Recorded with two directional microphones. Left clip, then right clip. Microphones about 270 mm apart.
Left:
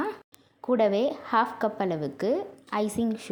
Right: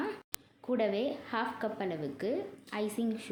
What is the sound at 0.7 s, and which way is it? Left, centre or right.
A woman's voice, left.